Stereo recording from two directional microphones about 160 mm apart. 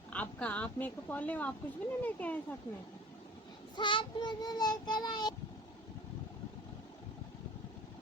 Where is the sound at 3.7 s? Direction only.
30° left (ahead or behind).